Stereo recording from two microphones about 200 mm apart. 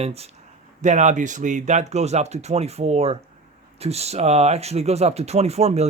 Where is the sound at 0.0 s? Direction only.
30° right (ahead or behind).